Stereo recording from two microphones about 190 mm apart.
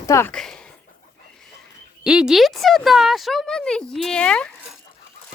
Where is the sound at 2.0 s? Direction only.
5° right (ahead or behind).